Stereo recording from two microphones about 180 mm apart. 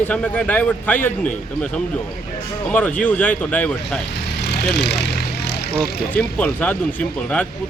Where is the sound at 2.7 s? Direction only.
10° left (ahead or behind).